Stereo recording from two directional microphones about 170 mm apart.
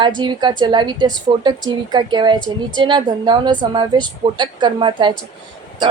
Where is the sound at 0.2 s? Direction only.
25° right (ahead or behind).